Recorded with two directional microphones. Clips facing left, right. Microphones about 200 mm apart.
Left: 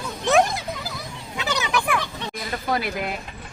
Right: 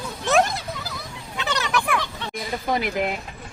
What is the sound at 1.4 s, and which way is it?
Children playing, centre (ahead or behind).